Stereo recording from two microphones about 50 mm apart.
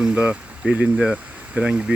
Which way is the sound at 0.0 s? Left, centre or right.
Right.